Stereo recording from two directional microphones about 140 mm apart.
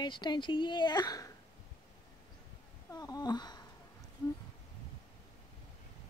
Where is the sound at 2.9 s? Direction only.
30° left (ahead or behind).